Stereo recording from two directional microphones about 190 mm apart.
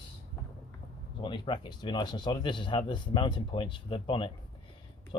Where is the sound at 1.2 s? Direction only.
25° left (ahead or behind).